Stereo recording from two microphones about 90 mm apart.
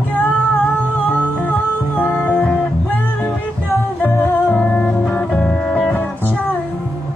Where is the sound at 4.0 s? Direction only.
15° left (ahead or behind).